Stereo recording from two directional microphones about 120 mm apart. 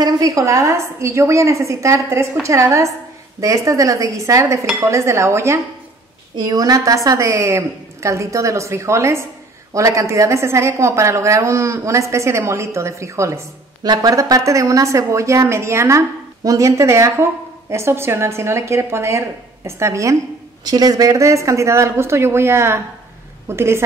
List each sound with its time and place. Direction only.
0.0 s a woman's voice: 30° right (ahead or behind)